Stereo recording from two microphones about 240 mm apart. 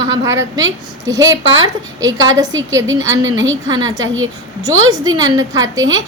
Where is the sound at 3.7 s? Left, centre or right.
Centre.